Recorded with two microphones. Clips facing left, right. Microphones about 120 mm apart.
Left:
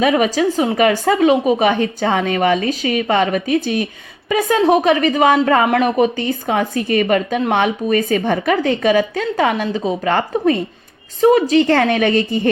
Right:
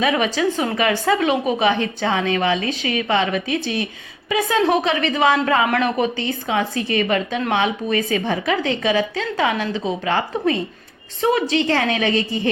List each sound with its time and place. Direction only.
0.0 s a woman's voice: 40° left (ahead or behind)
11.8 s a woman's voice: 55° left (ahead or behind)